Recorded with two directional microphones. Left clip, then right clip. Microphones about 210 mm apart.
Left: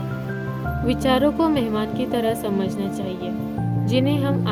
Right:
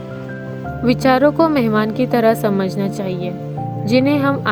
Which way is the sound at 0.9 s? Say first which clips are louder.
Right 6 dB; 20° right (ahead or behind).